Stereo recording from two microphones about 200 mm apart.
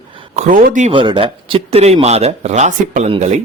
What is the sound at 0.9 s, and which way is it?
Speech, 25° right (ahead or behind).